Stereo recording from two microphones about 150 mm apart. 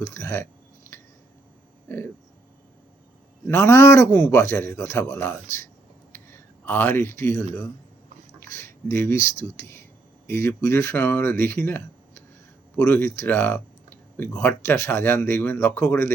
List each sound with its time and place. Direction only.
0.0 s speech: 15° left (ahead or behind)
1.9 s speech: 15° left (ahead or behind)
3.4 s speech: 15° left (ahead or behind)
6.1 s a sound: 15° left (ahead or behind)
8.4 s speech: 15° left (ahead or behind)